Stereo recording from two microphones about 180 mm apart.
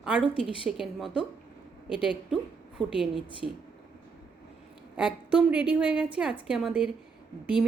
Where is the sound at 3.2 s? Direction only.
30° right (ahead or behind).